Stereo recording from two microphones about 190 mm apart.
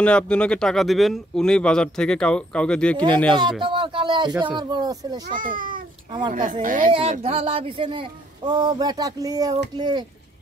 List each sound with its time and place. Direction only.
0.0 s speech: 5° left (ahead or behind)
3.6 s speech: 25° right (ahead or behind)
5.3 s a child's voice: 45° right (ahead or behind)
6.9 s speech: 30° right (ahead or behind)